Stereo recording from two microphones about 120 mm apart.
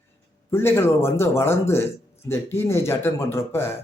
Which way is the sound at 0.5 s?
20° left (ahead or behind).